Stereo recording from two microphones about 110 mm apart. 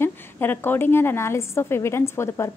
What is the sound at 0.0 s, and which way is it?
A woman's voice, 20° left (ahead or behind).